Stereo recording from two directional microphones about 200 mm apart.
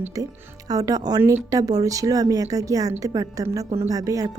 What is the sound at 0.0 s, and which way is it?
A woman's voice, 15° right (ahead or behind).